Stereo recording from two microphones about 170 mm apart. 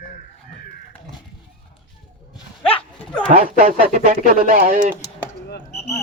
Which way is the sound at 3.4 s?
55° right (ahead or behind).